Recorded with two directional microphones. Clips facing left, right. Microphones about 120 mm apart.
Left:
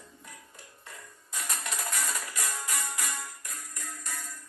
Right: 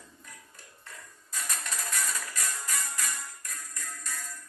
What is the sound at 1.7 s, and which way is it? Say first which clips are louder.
Music: left 1 dB; 15° left (ahead or behind).